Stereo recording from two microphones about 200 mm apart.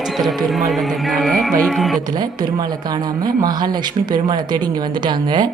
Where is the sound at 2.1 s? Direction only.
20° right (ahead or behind).